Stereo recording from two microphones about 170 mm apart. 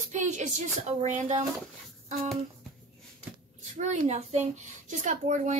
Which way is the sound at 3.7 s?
45° right (ahead or behind).